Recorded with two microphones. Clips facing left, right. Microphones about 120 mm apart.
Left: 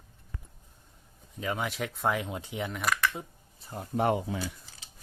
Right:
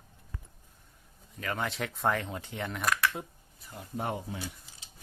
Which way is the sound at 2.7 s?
Centre (ahead or behind).